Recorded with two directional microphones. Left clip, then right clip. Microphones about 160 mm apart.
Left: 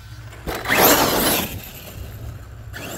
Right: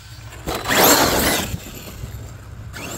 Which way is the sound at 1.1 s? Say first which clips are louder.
Right 1 dB; 20° left (ahead or behind).